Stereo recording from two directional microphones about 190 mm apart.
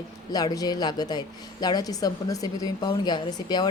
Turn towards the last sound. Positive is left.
turn(degrees=20)  # may be behind; listen again after turning